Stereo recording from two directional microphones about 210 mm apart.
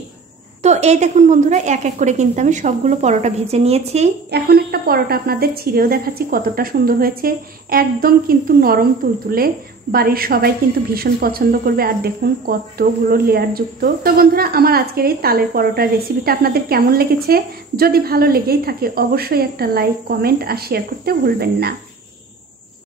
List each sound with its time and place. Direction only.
0.6 s a woman's voice: 30° right (ahead or behind)
4.3 s speech: 50° right (ahead or behind)